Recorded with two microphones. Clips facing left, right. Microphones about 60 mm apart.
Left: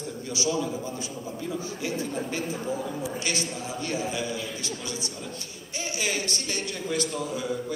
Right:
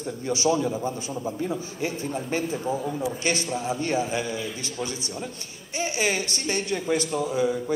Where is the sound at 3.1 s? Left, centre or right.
Right.